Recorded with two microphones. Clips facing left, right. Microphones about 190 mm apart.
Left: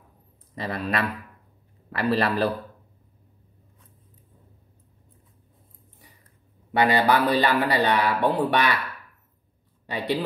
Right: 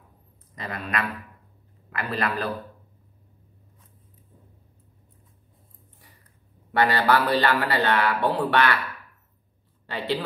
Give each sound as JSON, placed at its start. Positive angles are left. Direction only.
{"t": 0.6, "sound": "a man's voice", "side_deg": 35}
{"t": 6.7, "sound": "speech", "side_deg": 15}
{"t": 9.8, "sound": "speech", "side_deg": 15}